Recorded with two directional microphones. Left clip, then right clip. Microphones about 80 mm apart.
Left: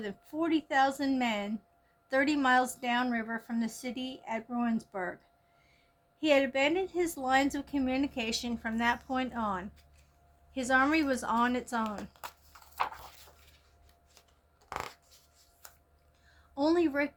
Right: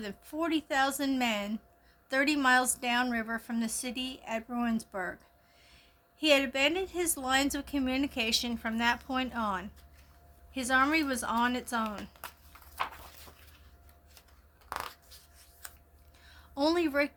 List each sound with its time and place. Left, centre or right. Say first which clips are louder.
0.0 s a woman's voice: even; right
10.5 s a woman's voice: even; centre
12.7 s a sound: left 2 dB; centre
16.3 s speech: even; right